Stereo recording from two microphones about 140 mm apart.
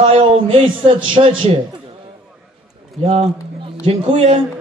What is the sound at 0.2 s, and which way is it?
A man's voice, 40° right (ahead or behind).